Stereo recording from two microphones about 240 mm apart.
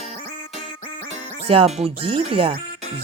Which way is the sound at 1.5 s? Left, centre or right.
Right.